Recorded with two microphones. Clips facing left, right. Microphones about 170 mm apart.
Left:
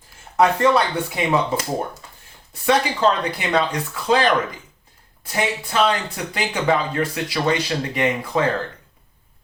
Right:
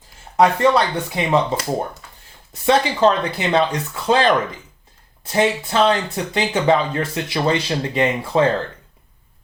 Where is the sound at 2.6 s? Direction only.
25° right (ahead or behind).